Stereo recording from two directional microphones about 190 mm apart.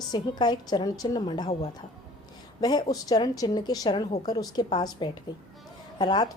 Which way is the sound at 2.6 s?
20° left (ahead or behind).